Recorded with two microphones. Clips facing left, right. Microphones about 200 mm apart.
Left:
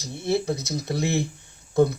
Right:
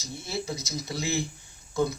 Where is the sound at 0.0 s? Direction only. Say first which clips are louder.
Left 9 dB; 60° left (ahead or behind).